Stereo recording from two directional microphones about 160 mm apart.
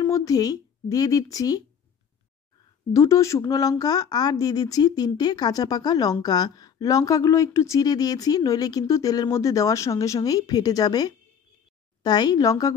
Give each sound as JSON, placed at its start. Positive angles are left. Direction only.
{"t": 0.0, "sound": "speech", "side_deg": 20}
{"t": 2.9, "sound": "speech", "side_deg": 20}